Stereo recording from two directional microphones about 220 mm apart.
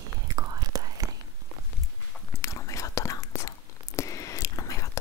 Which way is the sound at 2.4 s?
15° left (ahead or behind).